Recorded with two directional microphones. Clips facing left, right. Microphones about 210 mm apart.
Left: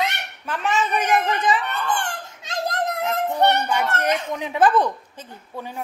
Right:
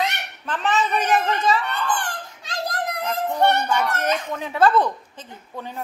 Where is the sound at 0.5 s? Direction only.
10° left (ahead or behind).